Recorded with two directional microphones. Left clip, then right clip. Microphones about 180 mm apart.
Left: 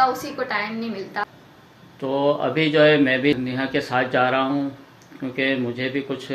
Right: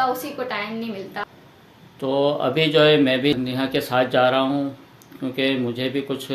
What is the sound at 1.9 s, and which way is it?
Speech, 25° right (ahead or behind).